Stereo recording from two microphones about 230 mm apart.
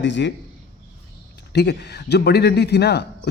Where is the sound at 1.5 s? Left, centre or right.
Left.